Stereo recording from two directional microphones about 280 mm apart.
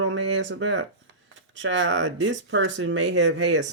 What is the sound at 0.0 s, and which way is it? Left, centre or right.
Speech, right.